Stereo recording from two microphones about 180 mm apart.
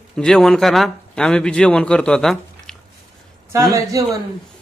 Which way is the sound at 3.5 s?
15° right (ahead or behind).